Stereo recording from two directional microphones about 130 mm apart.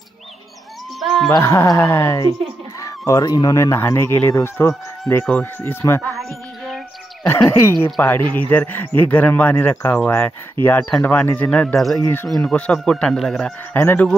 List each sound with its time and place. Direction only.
0.9 s livestock: centre (ahead or behind)
1.4 s speech: 20° left (ahead or behind)
7.4 s speech: 20° left (ahead or behind)
11.7 s speech: centre (ahead or behind)
13.7 s speech: 15° left (ahead or behind)